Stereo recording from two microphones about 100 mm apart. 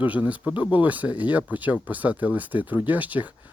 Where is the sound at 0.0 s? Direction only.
15° right (ahead or behind).